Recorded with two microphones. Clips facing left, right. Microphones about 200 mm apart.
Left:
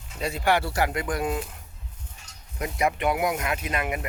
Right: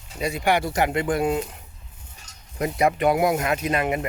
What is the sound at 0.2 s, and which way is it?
Speech, 15° right (ahead or behind).